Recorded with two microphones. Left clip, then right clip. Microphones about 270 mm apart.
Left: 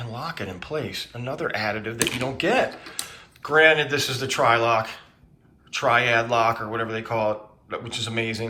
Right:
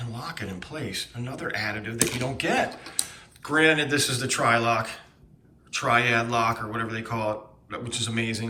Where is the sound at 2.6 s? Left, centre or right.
Right.